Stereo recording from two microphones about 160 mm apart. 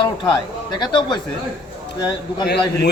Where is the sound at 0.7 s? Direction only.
25° left (ahead or behind).